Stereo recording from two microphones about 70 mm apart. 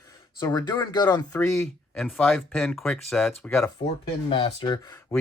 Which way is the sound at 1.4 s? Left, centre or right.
Left.